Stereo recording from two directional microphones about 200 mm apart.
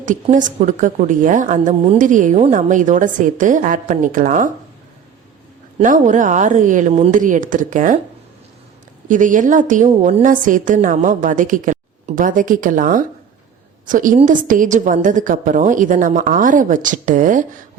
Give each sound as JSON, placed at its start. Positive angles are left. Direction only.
{"t": 0.0, "sound": "a woman's voice", "side_deg": -40}
{"t": 5.8, "sound": "a woman's voice", "side_deg": -40}
{"t": 9.0, "sound": "a woman's voice", "side_deg": -40}